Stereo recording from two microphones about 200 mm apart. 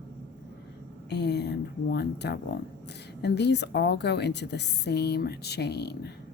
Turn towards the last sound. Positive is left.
turn(degrees=55)  # may be behind; listen again after turning